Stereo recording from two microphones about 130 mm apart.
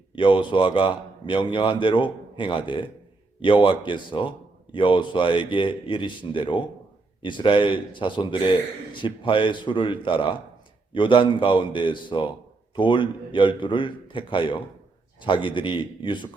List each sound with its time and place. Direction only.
0.2 s a man's voice: 40° left (ahead or behind)